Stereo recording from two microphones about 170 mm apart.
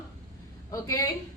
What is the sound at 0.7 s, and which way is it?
Speech, 20° left (ahead or behind).